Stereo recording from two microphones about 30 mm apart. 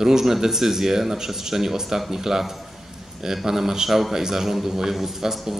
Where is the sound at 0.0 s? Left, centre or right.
Centre.